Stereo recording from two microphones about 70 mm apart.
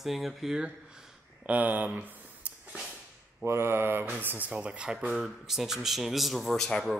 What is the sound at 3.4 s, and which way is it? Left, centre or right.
Speech, right.